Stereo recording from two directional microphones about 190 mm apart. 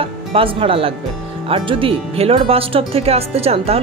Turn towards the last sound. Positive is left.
turn(degrees=-30)  # may be behind; listen again after turning